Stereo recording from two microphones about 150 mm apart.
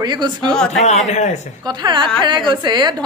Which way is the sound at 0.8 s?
50° left (ahead or behind).